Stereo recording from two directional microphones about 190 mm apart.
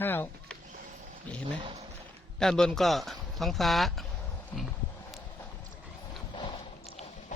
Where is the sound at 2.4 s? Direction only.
5° left (ahead or behind).